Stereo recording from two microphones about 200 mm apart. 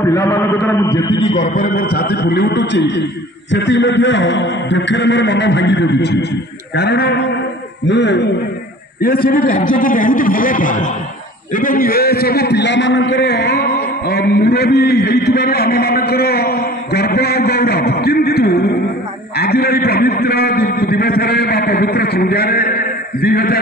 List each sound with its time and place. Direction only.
0.0 s a man's voice: 15° left (ahead or behind)
1.3 s a man's voice: 40° left (ahead or behind); by 8.3 s 60° left (ahead or behind)
9.0 s a man's voice: 45° left (ahead or behind)